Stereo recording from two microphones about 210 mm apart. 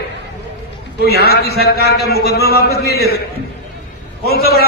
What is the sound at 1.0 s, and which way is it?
Speech, 50° left (ahead or behind).